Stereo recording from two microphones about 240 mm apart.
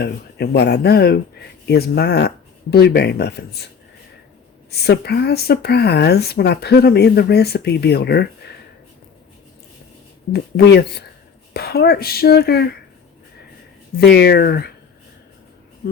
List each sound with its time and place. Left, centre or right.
0.0 s speech: left
4.7 s speech: left
10.3 s speech: left
13.9 s speech: left
15.8 s speech: left